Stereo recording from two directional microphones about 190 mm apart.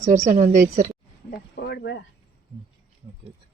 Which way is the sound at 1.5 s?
60° left (ahead or behind).